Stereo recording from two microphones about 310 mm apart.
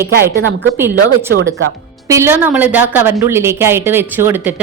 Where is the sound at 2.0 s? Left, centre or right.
Centre.